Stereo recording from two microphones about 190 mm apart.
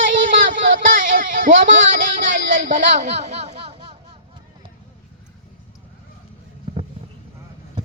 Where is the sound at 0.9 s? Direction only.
45° right (ahead or behind).